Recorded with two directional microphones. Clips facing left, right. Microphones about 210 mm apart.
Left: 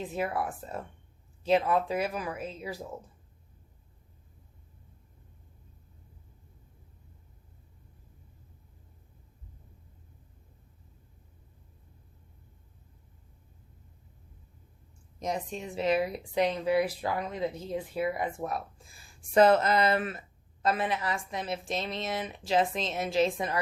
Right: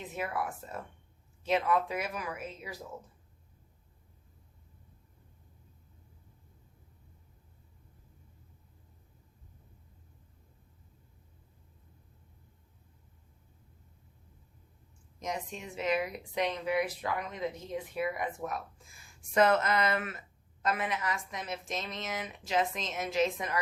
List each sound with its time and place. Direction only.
0.0 s speech: 30° left (ahead or behind)
15.2 s speech: 35° left (ahead or behind)